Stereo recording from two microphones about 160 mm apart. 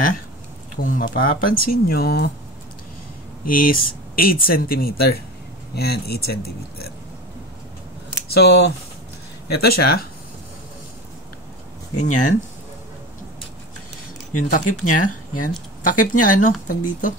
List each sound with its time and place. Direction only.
0.7 s speech: 60° left (ahead or behind); by 2.3 s 75° left (ahead or behind)
3.4 s speech: 60° left (ahead or behind)
8.4 s speech: 90° left
9.6 s speech: 80° left
12.0 s speech: 50° left (ahead or behind)
14.5 s speech: 55° left (ahead or behind)